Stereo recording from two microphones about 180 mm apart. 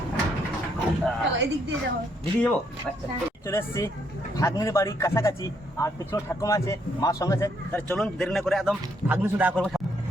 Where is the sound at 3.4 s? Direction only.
15° left (ahead or behind).